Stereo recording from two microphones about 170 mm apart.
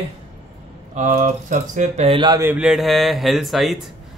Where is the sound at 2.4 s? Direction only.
5° right (ahead or behind).